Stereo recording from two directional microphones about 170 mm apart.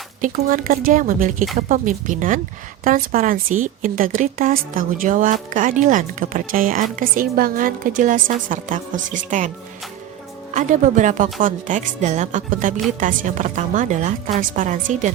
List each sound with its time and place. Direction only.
0.2 s a woman's voice: 55° right (ahead or behind)
10.5 s a woman's voice: 45° right (ahead or behind)